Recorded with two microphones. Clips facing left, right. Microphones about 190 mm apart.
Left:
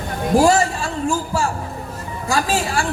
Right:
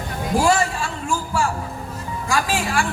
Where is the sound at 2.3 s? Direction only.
35° left (ahead or behind).